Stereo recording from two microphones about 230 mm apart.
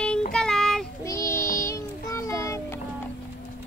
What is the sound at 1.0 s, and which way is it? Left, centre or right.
Child singing, centre.